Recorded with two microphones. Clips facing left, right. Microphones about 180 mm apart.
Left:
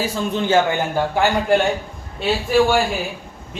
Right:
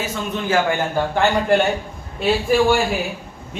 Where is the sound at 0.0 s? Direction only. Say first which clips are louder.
Left 3 dB; 30° left (ahead or behind).